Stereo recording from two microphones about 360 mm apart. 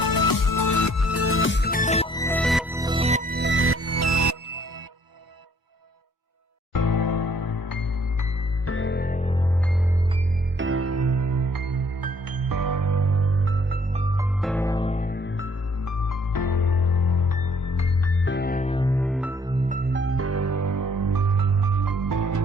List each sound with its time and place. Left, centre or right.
0.0 s music: left; by 4.6 s right
6.7 s music: left
8.6 s music: left; by 9.5 s centre
10.6 s music: right
14.4 s music: centre; by 15.5 s left
15.8 s music: left
18.3 s music: left; by 19.5 s centre
19.6 s music: right